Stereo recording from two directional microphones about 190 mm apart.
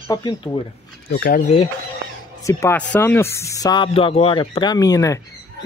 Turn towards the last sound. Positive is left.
turn(degrees=20)  # may be behind; listen again after turning